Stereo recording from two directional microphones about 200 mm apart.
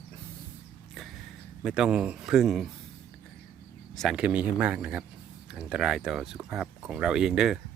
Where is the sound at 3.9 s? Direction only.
Centre (ahead or behind).